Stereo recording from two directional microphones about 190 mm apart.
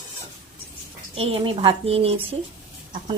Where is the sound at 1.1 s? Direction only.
30° right (ahead or behind).